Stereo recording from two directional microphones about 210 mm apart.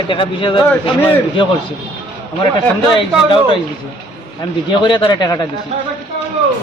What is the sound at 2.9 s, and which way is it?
Speech, 25° left (ahead or behind).